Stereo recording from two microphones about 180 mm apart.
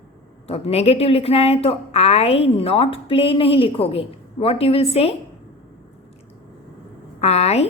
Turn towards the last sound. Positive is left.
turn(degrees=35)  # may be behind; listen again after turning